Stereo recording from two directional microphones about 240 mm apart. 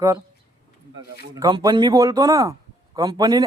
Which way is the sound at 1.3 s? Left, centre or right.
Centre.